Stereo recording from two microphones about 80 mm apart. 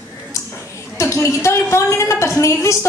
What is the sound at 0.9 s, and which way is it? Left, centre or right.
A woman's voice, left.